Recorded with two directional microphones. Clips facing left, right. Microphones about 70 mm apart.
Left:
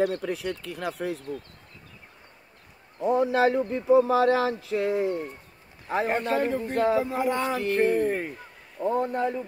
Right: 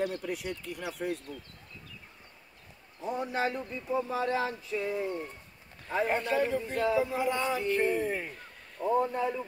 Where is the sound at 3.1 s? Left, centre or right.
Left.